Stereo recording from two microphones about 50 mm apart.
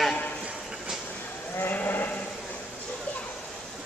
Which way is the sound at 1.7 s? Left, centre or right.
Left.